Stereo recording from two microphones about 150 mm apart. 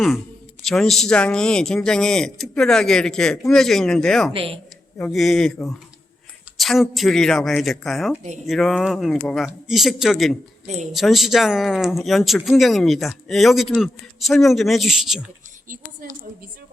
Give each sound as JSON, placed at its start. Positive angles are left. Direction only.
{"t": 0.6, "sound": "speech", "side_deg": 0}
{"t": 4.3, "sound": "speech", "side_deg": -35}
{"t": 4.9, "sound": "speech", "side_deg": 5}
{"t": 15.7, "sound": "a woman's voice", "side_deg": -65}